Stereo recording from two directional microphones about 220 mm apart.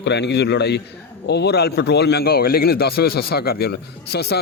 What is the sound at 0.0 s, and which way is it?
A man's voice, 50° left (ahead or behind).